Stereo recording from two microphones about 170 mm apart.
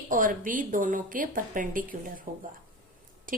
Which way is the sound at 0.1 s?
50° right (ahead or behind).